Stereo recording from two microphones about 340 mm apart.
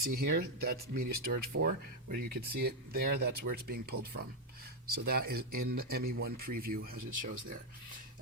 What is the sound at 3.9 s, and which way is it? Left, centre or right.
Speech, right.